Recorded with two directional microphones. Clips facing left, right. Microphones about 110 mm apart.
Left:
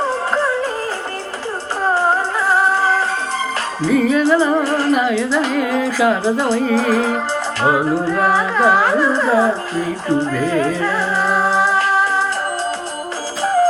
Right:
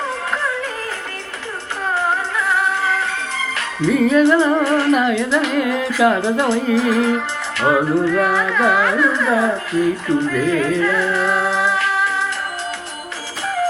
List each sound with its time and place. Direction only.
0.0 s music: 30° left (ahead or behind)
1.8 s music: 35° left (ahead or behind)
3.8 s music: centre (ahead or behind)
4.6 s speech: 35° left (ahead or behind)
4.9 s music: centre (ahead or behind)
8.0 s speech: 35° left (ahead or behind)
10.8 s music: 35° left (ahead or behind)
13.4 s music: 35° left (ahead or behind)